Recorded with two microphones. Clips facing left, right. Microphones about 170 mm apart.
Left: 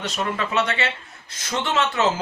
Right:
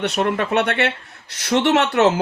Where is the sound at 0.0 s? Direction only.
60° right (ahead or behind).